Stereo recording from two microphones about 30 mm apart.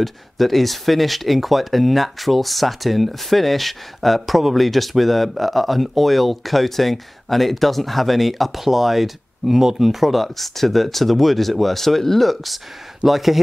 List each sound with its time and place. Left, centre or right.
0.0 s speech: centre
10.2 s speech: centre